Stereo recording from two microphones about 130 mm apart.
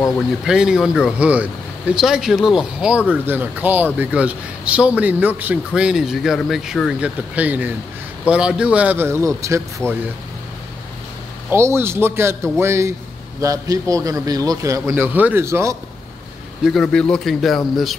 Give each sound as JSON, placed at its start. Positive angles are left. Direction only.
{"t": 0.5, "sound": "a man's voice", "side_deg": -5}
{"t": 11.5, "sound": "a man's voice", "side_deg": -20}
{"t": 16.6, "sound": "speech", "side_deg": 5}